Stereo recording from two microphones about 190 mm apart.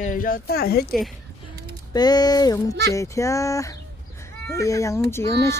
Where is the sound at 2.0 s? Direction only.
20° left (ahead or behind).